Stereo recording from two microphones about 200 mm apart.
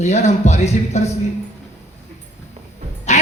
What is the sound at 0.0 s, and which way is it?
A man's voice, 35° left (ahead or behind).